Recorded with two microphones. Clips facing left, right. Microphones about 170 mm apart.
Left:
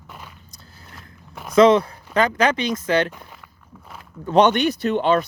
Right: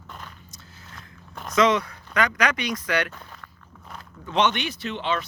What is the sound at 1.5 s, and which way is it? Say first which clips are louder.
Speech: left 7 dB; 30° left (ahead or behind).